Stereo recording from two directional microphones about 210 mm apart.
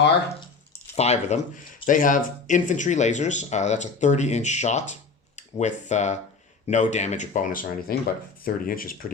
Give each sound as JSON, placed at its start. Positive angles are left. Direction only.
{"t": 0.9, "sound": "speech", "side_deg": 30}